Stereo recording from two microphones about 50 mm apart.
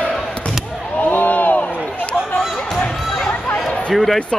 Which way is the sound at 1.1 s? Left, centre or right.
Left.